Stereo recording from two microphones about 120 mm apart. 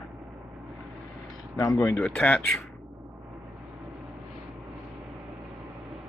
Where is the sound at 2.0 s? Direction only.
10° left (ahead or behind).